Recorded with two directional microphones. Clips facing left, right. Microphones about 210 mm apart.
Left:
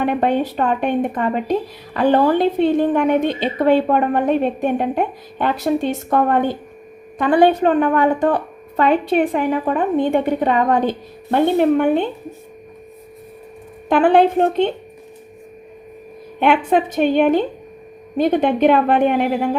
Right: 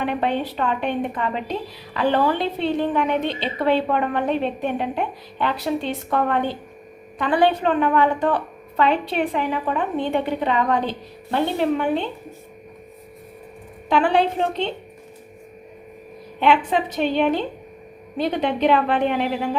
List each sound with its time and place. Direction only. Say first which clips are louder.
0.0 s a woman's voice: left 5 dB; 45° left (ahead or behind)
13.9 s a woman's voice: left 6 dB; 50° left (ahead or behind)
16.4 s a woman's voice: left 3 dB; 50° left (ahead or behind)